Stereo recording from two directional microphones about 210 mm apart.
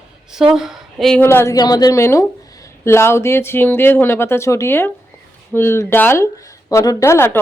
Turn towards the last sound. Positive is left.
turn(degrees=10)  # may be behind; listen again after turning